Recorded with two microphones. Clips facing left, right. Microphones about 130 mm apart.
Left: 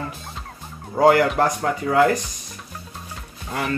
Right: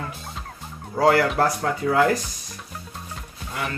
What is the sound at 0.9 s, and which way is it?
Speech, 15° left (ahead or behind).